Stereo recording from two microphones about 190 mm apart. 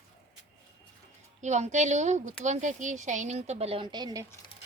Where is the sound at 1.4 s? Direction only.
40° right (ahead or behind); by 4.2 s 20° right (ahead or behind).